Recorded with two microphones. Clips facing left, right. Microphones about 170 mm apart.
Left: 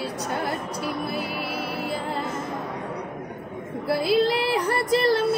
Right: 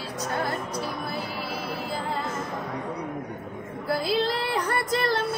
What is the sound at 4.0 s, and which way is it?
Child singing, 5° left (ahead or behind).